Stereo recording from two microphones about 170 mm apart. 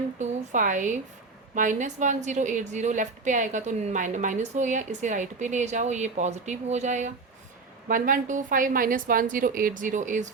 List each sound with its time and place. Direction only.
0.2 s a woman's voice: 50° right (ahead or behind)